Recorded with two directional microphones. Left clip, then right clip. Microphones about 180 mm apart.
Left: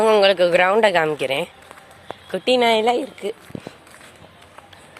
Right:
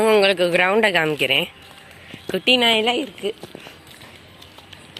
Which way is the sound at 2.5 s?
25° left (ahead or behind).